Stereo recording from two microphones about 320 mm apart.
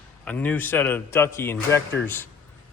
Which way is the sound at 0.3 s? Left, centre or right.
Centre.